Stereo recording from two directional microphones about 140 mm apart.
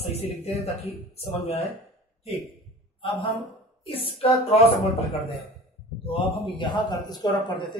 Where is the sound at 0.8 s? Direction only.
50° left (ahead or behind).